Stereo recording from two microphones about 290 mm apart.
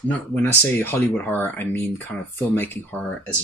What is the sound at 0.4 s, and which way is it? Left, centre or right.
Speech, centre.